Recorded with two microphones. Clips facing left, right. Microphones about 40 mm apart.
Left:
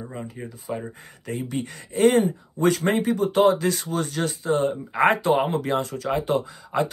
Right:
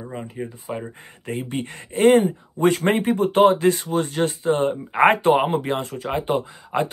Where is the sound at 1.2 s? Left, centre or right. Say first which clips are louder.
Right 1 dB; right.